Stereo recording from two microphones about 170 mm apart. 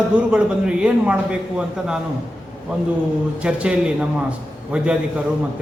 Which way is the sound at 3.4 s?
5° right (ahead or behind).